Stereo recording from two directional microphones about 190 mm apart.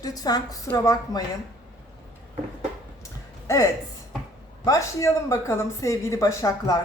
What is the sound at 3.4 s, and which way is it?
Speech, 15° left (ahead or behind).